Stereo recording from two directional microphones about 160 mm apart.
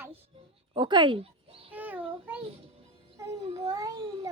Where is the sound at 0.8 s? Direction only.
30° right (ahead or behind).